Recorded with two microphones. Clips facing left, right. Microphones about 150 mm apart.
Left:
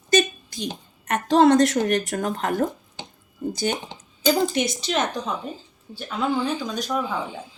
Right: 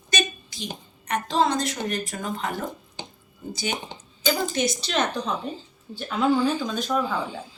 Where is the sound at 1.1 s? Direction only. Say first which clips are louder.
Left 7 dB; 60° left (ahead or behind).